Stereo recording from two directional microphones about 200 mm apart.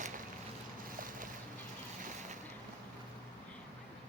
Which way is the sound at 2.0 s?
35° right (ahead or behind).